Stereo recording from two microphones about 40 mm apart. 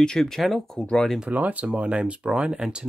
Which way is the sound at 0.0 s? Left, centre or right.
Centre.